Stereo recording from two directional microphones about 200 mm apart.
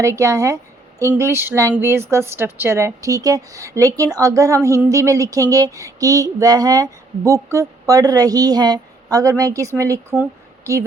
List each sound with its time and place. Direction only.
0.0 s a woman's voice: 15° right (ahead or behind)